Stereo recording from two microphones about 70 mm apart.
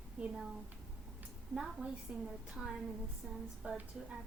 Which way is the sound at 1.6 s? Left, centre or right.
Centre.